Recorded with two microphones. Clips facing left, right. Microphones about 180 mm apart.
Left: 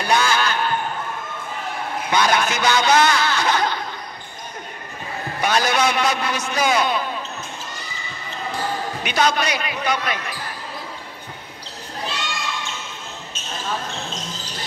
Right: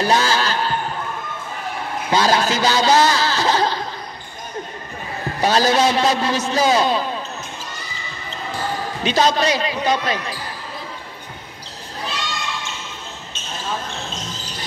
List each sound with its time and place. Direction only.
0.0 s a sound: 30° right (ahead or behind)
2.0 s a man's voice: 30° right (ahead or behind)
5.4 s a man's voice: 30° right (ahead or behind)
9.0 s a man's voice: 30° right (ahead or behind)